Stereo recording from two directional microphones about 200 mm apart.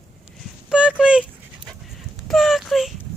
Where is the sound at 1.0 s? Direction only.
5° right (ahead or behind).